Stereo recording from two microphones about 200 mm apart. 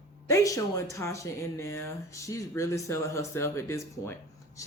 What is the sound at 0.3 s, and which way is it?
Speech, 15° left (ahead or behind).